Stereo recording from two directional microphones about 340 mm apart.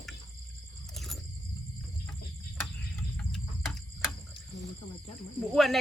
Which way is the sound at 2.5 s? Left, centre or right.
Centre.